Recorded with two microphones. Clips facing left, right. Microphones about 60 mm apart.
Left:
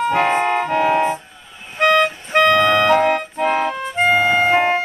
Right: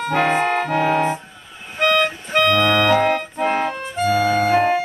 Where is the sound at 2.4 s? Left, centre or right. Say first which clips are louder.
Left 3 dB; centre.